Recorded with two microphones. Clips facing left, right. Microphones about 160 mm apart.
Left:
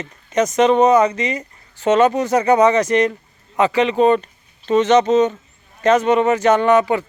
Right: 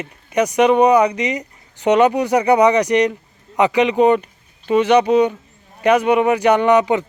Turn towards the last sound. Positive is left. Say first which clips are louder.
# right 1 dB
turn(degrees=-20)  # may be behind; listen again after turning